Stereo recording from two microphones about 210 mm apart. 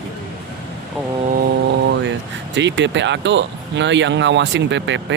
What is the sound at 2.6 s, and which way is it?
Speech, 60° right (ahead or behind).